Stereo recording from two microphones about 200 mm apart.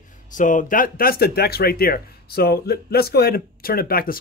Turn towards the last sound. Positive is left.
turn(degrees=50)  # may be behind; listen again after turning